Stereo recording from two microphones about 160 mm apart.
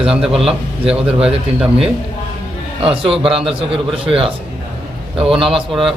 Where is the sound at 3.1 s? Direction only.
Centre (ahead or behind).